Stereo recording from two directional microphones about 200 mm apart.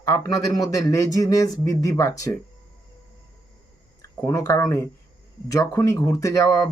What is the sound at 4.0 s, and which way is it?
Speech, 15° left (ahead or behind).